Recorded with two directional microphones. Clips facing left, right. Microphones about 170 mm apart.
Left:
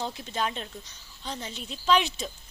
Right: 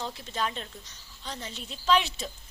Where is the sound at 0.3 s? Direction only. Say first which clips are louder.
Left 1 dB; 10° left (ahead or behind).